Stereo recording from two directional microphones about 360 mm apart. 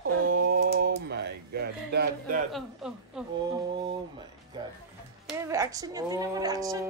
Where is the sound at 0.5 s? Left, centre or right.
Right.